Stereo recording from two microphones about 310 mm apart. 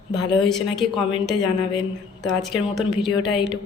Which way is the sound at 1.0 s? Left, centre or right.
Centre.